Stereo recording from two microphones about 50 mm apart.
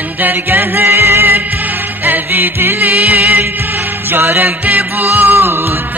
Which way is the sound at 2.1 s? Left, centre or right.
Right.